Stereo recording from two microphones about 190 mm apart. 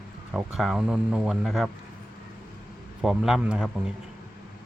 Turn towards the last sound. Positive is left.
turn(degrees=-5)  # may be behind; listen again after turning